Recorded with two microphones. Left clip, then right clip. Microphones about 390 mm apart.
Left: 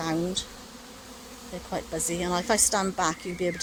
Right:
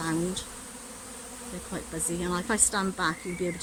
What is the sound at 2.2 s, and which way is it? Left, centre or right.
Speech, centre.